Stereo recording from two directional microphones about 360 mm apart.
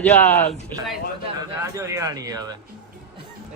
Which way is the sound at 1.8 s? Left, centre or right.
Centre.